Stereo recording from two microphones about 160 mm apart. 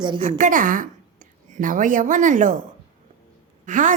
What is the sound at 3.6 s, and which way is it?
Speech, 55° right (ahead or behind).